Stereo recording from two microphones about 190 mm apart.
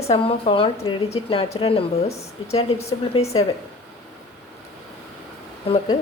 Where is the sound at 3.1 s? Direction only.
30° left (ahead or behind).